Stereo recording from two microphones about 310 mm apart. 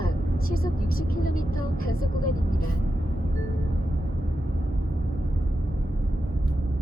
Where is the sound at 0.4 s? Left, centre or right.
Left.